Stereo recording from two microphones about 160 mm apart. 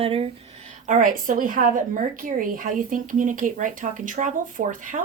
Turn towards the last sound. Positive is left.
turn(degrees=-55)  # may be behind; listen again after turning